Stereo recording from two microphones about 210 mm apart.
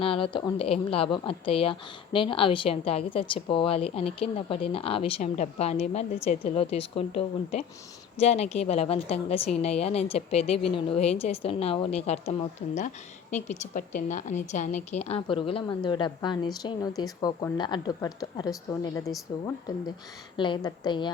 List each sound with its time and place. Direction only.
0.0 s a woman's voice: 25° left (ahead or behind)
20.3 s a woman's voice: 20° left (ahead or behind)